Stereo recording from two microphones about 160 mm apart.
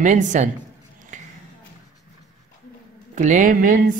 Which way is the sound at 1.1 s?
50° right (ahead or behind).